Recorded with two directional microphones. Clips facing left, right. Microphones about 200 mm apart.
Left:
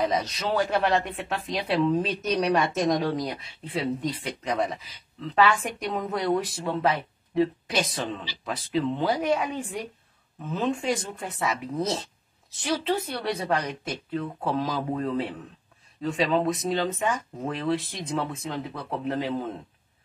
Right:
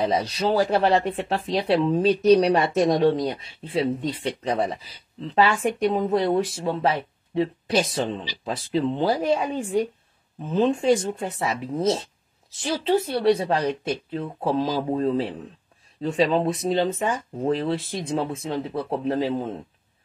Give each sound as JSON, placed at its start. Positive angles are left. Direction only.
{"t": 0.0, "sound": "a woman's voice", "side_deg": -30}